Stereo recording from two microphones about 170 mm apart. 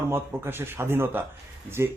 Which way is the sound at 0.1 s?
15° right (ahead or behind).